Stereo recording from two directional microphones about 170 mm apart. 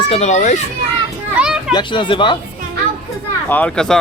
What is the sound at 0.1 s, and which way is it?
Speech, 40° left (ahead or behind).